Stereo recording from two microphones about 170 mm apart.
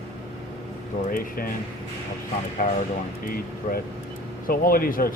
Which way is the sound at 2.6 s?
55° left (ahead or behind).